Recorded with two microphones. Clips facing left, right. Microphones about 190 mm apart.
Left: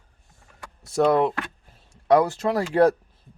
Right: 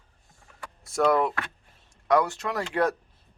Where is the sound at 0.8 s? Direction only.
25° left (ahead or behind).